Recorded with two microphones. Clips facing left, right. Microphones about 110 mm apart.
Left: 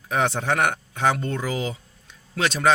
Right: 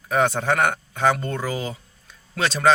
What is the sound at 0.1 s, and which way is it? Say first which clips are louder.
Speech: right 2 dB; 15° left (ahead or behind).